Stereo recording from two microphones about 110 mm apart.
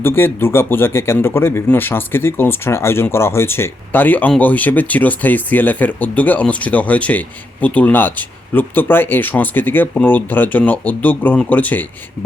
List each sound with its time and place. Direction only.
0.0 s speech: 20° left (ahead or behind)